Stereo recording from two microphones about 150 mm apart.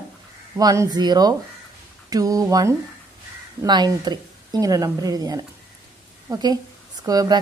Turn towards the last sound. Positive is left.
turn(degrees=-25)  # may be behind; listen again after turning